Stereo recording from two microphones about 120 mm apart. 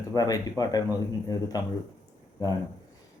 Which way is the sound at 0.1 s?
30° left (ahead or behind).